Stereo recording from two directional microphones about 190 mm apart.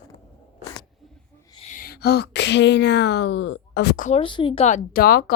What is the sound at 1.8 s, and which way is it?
Speech, 55° left (ahead or behind).